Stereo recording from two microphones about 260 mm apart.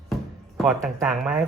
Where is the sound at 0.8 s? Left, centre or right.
Centre.